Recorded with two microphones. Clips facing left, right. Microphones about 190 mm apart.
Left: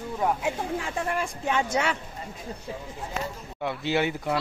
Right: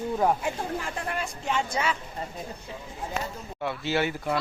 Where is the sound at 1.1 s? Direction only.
55° left (ahead or behind); by 1.9 s 70° left (ahead or behind).